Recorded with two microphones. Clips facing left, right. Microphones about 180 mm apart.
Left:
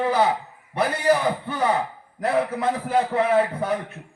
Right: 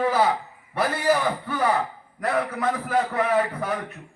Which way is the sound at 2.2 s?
25° left (ahead or behind).